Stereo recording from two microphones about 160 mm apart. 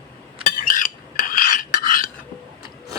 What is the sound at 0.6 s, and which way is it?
Stir, 60° left (ahead or behind).